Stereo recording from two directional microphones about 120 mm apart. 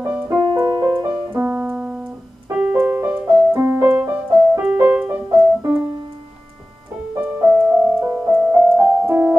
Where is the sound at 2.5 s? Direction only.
10° right (ahead or behind).